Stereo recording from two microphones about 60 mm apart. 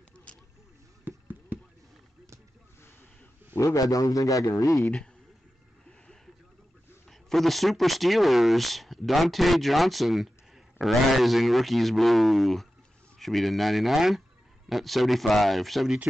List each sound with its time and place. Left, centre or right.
1.0 s a sound: right
3.5 s a man's voice: left
7.1 s speech: centre